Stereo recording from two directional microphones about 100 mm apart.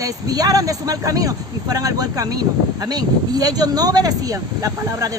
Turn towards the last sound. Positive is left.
turn(degrees=-35)  # may be behind; listen again after turning